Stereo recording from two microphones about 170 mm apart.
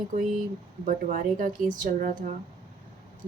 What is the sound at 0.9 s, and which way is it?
A woman's voice, 50° right (ahead or behind).